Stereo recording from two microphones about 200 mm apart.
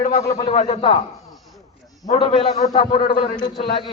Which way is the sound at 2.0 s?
20° left (ahead or behind).